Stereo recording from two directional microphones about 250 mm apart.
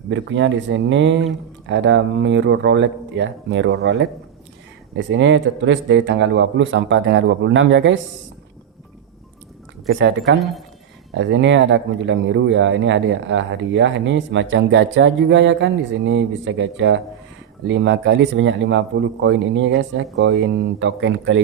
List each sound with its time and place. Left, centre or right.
0.1 s speech: right
9.9 s speech: right